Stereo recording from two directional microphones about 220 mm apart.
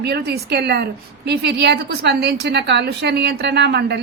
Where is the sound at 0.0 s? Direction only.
50° right (ahead or behind).